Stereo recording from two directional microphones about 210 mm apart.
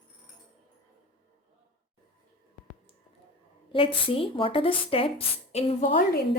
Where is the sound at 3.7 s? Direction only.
25° left (ahead or behind).